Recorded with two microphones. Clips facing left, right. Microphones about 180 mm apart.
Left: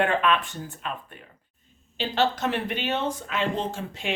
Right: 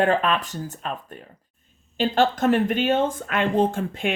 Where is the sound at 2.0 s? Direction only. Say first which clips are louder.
Right 5 dB; 50° right (ahead or behind).